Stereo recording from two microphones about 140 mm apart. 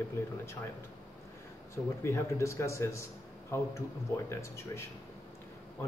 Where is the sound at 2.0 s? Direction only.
20° left (ahead or behind).